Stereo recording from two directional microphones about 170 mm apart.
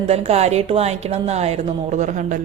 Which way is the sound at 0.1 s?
40° right (ahead or behind).